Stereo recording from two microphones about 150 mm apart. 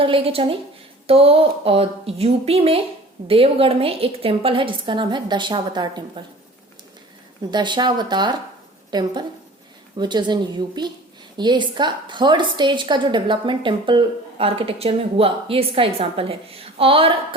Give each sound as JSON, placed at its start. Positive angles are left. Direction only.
{"t": 0.0, "sound": "a woman's voice", "side_deg": -40}
{"t": 7.5, "sound": "a woman's voice", "side_deg": -30}